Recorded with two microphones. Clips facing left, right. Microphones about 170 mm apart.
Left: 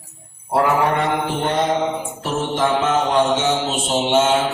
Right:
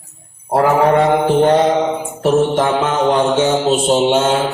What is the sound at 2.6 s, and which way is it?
Mantra, 55° right (ahead or behind).